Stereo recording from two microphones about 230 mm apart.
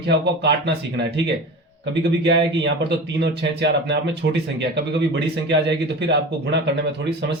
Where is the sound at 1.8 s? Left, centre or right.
Right.